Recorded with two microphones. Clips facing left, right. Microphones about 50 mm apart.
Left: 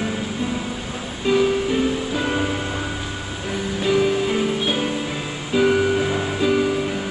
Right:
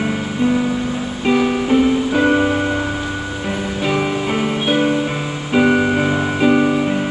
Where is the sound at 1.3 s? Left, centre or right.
Right.